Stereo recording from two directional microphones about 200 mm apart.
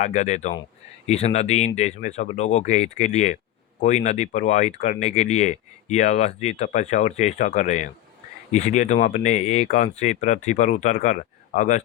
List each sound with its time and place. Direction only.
0.0 s speech: 35° left (ahead or behind)